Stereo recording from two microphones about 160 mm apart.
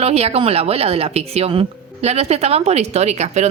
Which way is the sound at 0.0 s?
40° right (ahead or behind).